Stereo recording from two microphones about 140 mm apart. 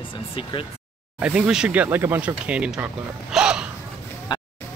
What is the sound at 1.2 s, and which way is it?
Speech, 5° right (ahead or behind).